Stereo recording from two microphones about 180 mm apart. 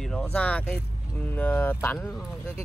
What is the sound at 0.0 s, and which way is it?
Speech, 5° left (ahead or behind).